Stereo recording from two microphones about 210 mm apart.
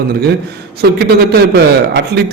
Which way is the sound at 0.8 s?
50° right (ahead or behind).